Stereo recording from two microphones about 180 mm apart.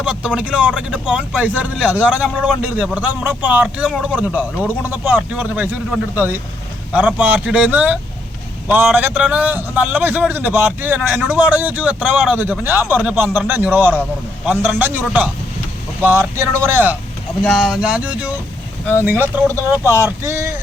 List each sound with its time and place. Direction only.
0.0 s a man's voice: 5° right (ahead or behind)
17.4 s a man's voice: centre (ahead or behind); by 20.5 s 15° right (ahead or behind)